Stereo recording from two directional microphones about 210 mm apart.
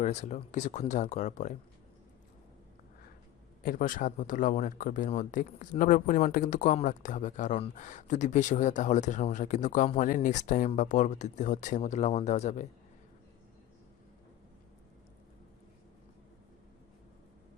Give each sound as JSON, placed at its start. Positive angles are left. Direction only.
{"t": 0.0, "sound": "speech", "side_deg": 35}
{"t": 3.6, "sound": "speech", "side_deg": 40}